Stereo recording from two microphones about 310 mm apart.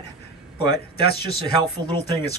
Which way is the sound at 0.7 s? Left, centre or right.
Left.